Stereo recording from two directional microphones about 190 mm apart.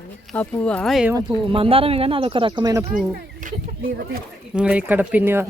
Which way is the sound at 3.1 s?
45° right (ahead or behind).